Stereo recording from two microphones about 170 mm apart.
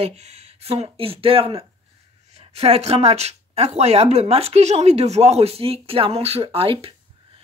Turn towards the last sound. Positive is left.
turn(degrees=-35)  # may be behind; listen again after turning